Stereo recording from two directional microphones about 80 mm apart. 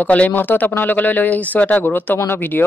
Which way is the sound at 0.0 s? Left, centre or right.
Centre.